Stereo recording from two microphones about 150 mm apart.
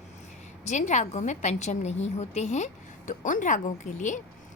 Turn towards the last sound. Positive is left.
turn(degrees=55)  # may be behind; listen again after turning